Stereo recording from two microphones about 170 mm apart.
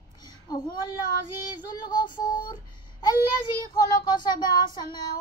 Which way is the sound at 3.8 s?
25° left (ahead or behind).